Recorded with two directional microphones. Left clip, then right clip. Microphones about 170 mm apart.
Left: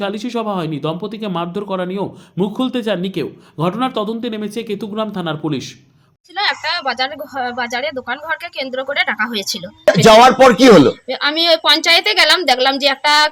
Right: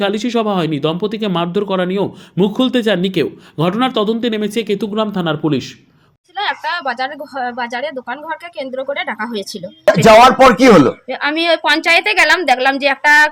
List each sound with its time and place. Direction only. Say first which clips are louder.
0.0 s speech: right 5 dB; 25° right (ahead or behind)
6.3 s speech: left 1 dB; 5° right (ahead or behind)
9.9 s speech: right 1 dB; 25° left (ahead or behind)
11.1 s speech: left 1 dB; 5° right (ahead or behind)